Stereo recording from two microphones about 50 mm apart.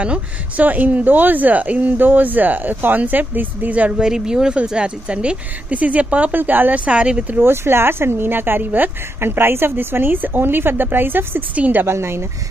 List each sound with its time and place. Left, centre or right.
0.0 s speech: right
4.0 s speech: centre
6.3 s speech: right
7.3 s a woman's voice: right
9.2 s a woman's voice: right
11.5 s speech: right
11.8 s speech: right